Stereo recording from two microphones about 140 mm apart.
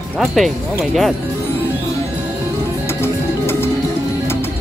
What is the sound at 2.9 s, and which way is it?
Music, 15° left (ahead or behind).